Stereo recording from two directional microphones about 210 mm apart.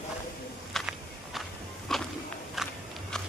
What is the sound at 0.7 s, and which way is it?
Walk, centre (ahead or behind).